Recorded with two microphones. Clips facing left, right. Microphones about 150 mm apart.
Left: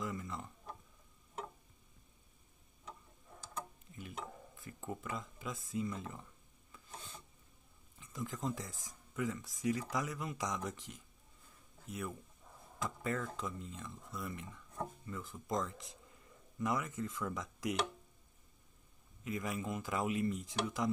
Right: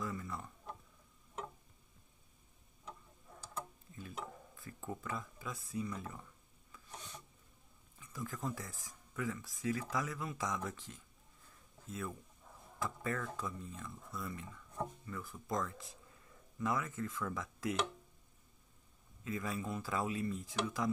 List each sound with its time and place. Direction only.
0.0 s a sound: 20° left (ahead or behind)
4.6 s a sound: 20° left (ahead or behind)
5.0 s speech: 20° left (ahead or behind)
6.7 s ratchet: 25° left (ahead or behind)
8.0 s speech: 20° left (ahead or behind)
19.2 s speech: 20° left (ahead or behind)